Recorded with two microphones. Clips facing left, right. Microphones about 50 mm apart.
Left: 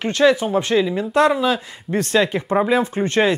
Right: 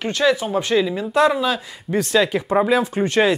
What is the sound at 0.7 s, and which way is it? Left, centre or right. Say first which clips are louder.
Speech: even; centre.